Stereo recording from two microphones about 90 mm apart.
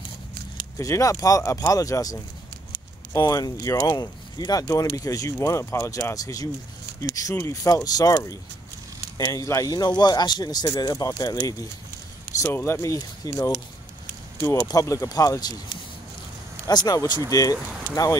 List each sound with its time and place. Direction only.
0.7 s speech: 35° left (ahead or behind)
3.2 s speech: 45° left (ahead or behind)
3.8 s speech: 50° left (ahead or behind)
12.4 s speech: 25° left (ahead or behind); by 13.5 s 40° left (ahead or behind)
14.7 s speech: 35° left (ahead or behind)
16.6 s speech: 45° left (ahead or behind)